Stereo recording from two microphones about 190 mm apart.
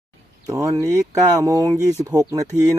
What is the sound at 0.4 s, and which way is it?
Speech, 15° right (ahead or behind).